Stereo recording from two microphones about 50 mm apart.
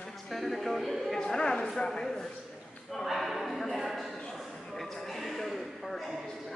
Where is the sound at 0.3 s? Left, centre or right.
Centre.